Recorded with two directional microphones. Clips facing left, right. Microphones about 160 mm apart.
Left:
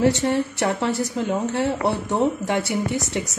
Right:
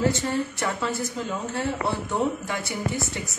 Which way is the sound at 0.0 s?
70° left (ahead or behind).